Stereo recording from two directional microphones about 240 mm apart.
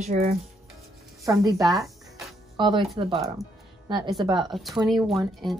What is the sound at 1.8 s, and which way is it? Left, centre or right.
Music, centre.